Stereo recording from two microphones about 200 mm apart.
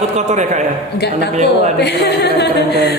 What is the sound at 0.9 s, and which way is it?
Speech, 55° left (ahead or behind).